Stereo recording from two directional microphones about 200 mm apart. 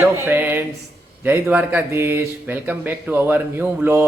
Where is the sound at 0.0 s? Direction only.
10° right (ahead or behind).